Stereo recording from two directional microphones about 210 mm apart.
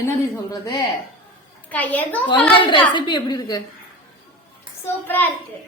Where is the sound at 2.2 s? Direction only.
25° left (ahead or behind).